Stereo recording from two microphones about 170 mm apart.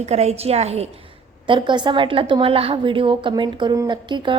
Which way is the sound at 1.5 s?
30° right (ahead or behind).